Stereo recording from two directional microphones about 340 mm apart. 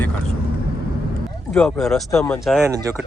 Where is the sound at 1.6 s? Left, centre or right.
Centre.